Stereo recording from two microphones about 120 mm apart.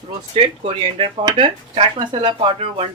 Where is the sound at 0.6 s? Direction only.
55° right (ahead or behind).